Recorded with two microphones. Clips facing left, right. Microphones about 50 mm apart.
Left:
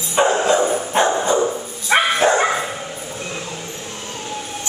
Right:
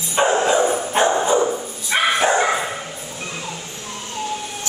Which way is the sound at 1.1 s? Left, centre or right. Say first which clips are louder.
Even; centre.